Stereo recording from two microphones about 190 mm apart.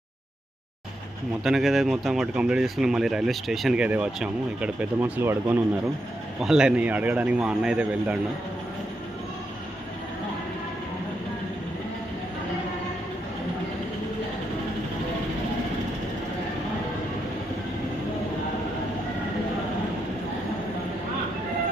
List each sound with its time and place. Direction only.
1.5 s speech: centre (ahead or behind)